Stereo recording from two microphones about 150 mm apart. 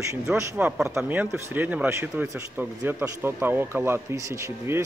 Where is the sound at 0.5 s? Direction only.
10° right (ahead or behind).